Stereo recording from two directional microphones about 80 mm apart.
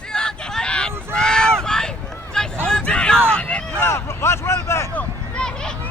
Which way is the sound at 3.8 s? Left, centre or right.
Left.